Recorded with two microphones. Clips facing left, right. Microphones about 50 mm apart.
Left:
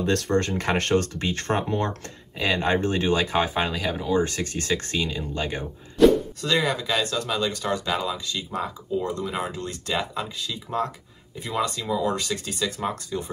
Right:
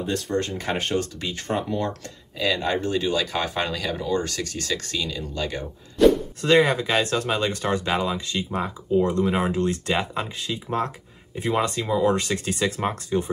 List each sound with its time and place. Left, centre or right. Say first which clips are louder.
0.0 s speech: left 3 dB; left
0.3 s speech: left 2 dB; left
3.4 s speech: left 1 dB; centre
4.2 s speech: left 3 dB; left
6.0 s plop: even; centre
6.4 s speech: right 9 dB; right